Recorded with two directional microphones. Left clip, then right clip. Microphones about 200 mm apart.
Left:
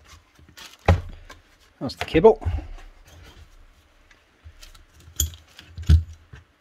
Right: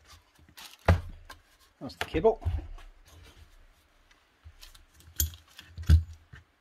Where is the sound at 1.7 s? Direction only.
45° left (ahead or behind).